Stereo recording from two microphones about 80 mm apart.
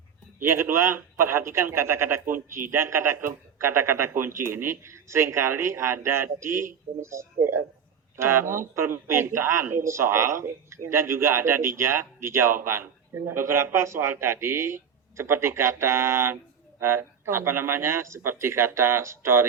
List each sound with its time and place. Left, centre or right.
0.3 s speech: right